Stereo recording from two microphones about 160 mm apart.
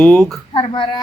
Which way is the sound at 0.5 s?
30° left (ahead or behind).